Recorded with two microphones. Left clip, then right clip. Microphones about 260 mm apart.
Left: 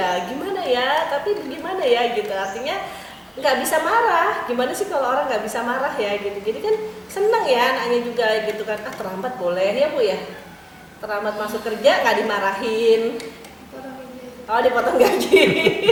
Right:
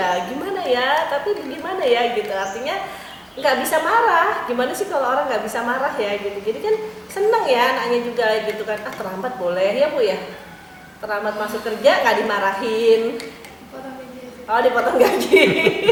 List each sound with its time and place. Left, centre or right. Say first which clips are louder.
0.3 s a woman's voice: right 1 dB; centre
9.0 s a woman's voice: right 1 dB; centre
9.5 s a woman's voice: right 1 dB; centre
11.1 s a woman's voice: right 1 dB; centre
14.8 s a woman's voice: right 1 dB; centre